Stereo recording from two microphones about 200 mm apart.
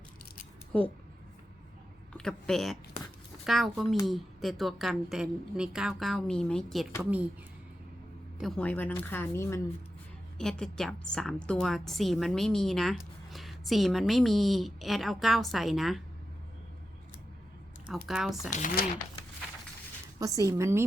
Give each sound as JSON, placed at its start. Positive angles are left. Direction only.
{"t": 2.1, "sound": "a woman's voice", "side_deg": 5}
{"t": 8.4, "sound": "a woman's voice", "side_deg": 5}
{"t": 17.8, "sound": "a woman's voice", "side_deg": -5}
{"t": 18.5, "sound": "speech", "side_deg": 45}
{"t": 20.1, "sound": "speech", "side_deg": -15}